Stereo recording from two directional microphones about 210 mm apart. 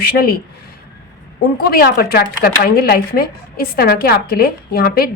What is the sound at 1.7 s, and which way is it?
Speech, 45° left (ahead or behind).